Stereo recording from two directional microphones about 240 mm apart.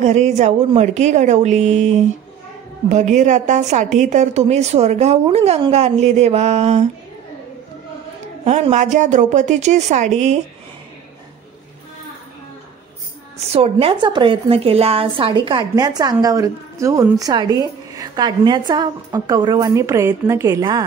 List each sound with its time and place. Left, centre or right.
0.0 s a woman's voice: right
8.5 s a woman's voice: right
13.5 s a woman's voice: right